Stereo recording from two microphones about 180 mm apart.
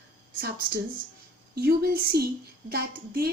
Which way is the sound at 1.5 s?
60° right (ahead or behind).